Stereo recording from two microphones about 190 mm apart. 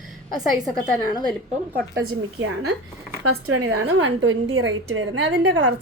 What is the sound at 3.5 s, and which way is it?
A woman's voice, 90° right.